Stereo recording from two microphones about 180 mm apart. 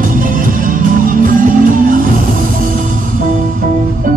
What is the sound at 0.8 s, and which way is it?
Music, 50° right (ahead or behind).